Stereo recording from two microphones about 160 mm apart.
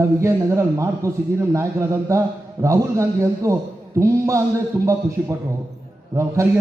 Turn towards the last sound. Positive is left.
turn(degrees=-20)  # may be behind; listen again after turning